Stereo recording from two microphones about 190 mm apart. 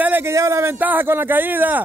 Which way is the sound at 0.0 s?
10° right (ahead or behind).